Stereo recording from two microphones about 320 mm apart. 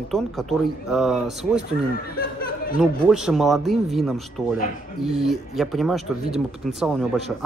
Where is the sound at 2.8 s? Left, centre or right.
Centre.